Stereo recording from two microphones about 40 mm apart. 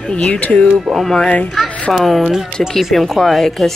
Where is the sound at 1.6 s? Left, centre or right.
Left.